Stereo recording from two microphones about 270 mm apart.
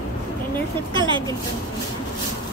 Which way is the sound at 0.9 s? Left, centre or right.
Centre.